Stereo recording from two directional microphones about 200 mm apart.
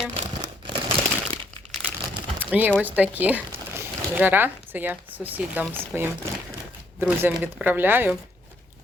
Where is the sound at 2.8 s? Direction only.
10° right (ahead or behind).